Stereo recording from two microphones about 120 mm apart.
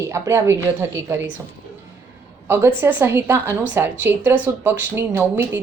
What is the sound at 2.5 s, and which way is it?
A woman's voice, 20° right (ahead or behind).